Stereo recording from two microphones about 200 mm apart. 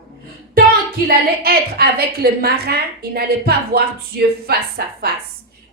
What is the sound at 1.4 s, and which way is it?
A woman's voice, 50° right (ahead or behind).